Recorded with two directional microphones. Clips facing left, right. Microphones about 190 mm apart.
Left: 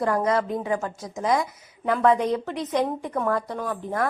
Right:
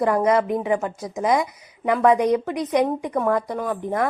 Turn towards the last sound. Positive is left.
turn(degrees=-15)  # may be behind; listen again after turning